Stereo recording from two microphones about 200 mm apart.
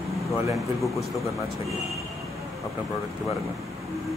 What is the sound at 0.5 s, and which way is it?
Speech, centre (ahead or behind).